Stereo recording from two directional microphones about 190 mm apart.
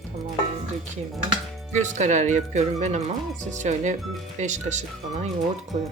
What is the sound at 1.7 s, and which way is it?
Speech, 40° right (ahead or behind).